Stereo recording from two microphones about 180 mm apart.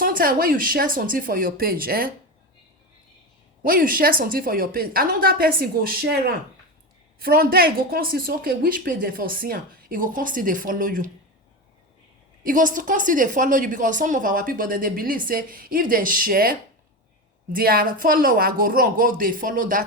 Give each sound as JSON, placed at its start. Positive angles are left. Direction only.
{"t": 0.0, "sound": "speech", "side_deg": -55}
{"t": 3.6, "sound": "speech", "side_deg": -55}
{"t": 12.4, "sound": "speech", "side_deg": -50}